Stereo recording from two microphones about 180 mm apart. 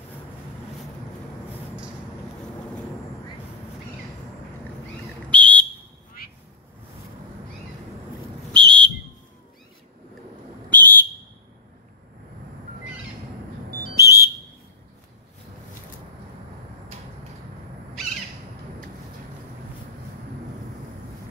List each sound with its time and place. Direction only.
5.3 s whistle: 10° left (ahead or behind)
8.5 s whistle: 5° left (ahead or behind)
10.7 s whistle: 10° left (ahead or behind)
13.9 s whistle: 20° left (ahead or behind)